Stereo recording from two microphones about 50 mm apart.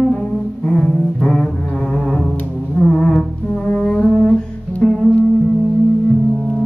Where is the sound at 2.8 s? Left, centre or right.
Centre.